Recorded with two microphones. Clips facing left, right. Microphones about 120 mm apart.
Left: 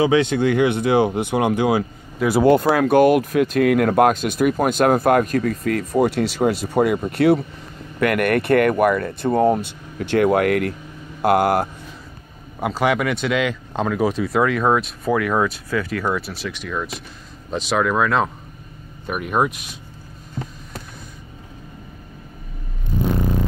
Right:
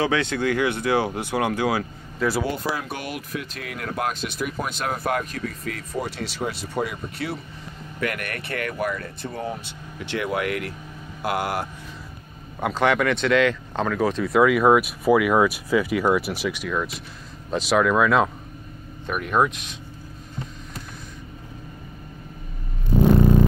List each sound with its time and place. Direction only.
0.0 s speech: 20° left (ahead or behind)
2.4 s speech: 55° left (ahead or behind)
12.5 s speech: 5° left (ahead or behind)
19.0 s speech: 10° left (ahead or behind)